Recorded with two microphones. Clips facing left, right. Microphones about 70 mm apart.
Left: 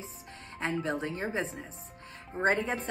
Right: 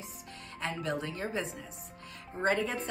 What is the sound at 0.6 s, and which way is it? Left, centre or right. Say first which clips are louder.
Speech: left 3 dB; left.